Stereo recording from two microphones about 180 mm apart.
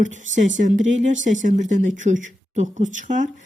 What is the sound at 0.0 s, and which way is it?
A woman's voice, 45° right (ahead or behind).